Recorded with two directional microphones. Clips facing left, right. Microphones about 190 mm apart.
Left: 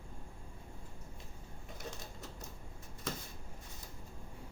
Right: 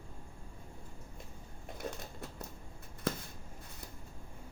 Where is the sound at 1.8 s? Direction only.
55° right (ahead or behind).